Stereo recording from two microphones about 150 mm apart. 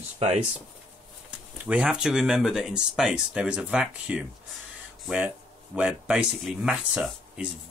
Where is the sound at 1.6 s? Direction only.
5° right (ahead or behind).